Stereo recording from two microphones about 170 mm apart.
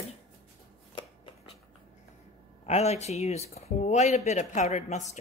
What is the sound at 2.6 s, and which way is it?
Speech, 40° left (ahead or behind).